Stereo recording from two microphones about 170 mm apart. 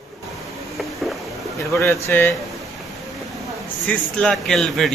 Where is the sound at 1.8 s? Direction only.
15° left (ahead or behind).